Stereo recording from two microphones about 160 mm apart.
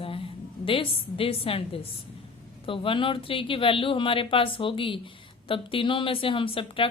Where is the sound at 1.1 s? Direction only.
35° left (ahead or behind).